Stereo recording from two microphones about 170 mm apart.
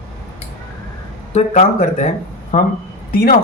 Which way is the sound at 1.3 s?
45° left (ahead or behind).